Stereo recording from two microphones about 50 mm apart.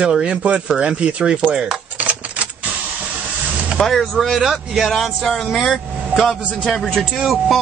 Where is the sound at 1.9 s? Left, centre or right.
Right.